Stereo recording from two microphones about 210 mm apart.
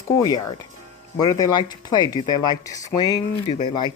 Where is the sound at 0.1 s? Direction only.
20° left (ahead or behind).